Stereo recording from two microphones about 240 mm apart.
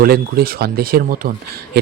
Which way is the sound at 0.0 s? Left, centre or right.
Right.